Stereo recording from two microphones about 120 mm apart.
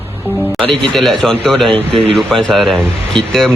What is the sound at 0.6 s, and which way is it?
A man's voice, 5° left (ahead or behind).